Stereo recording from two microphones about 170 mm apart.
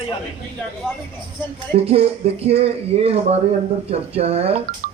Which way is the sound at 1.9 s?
35° right (ahead or behind).